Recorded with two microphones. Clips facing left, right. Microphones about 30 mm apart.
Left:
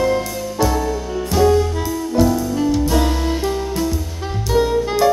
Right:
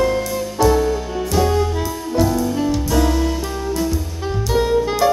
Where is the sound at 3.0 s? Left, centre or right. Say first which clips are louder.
Right 2 dB; centre.